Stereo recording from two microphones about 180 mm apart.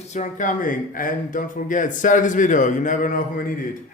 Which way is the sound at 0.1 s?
45° left (ahead or behind).